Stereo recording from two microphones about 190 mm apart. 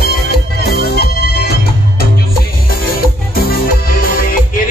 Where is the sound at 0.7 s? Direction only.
55° left (ahead or behind).